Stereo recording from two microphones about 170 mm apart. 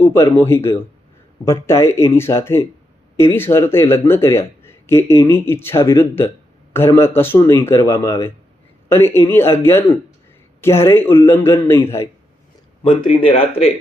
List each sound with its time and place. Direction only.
0.0 s speech: 15° left (ahead or behind)
12.9 s speech: 30° left (ahead or behind)